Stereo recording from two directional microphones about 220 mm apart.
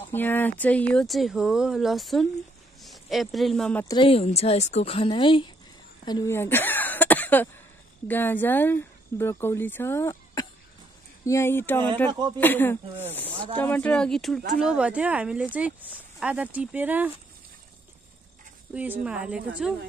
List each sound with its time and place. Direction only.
0.1 s speech: 10° left (ahead or behind)
3.8 s a woman's voice: 20° left (ahead or behind); by 17.1 s 5° right (ahead or behind)
18.7 s speech: 5° right (ahead or behind)